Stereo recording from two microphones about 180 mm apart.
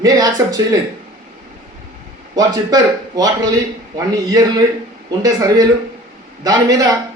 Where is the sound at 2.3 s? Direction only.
20° right (ahead or behind).